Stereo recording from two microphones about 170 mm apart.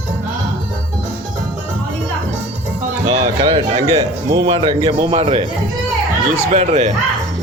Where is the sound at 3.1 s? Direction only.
35° right (ahead or behind).